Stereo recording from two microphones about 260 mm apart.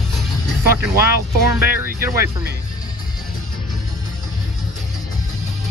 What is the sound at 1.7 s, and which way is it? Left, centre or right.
Speech, centre.